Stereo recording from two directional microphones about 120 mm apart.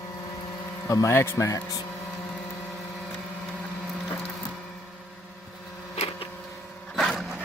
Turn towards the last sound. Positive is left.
turn(degrees=0)  # may be behind; listen again after turning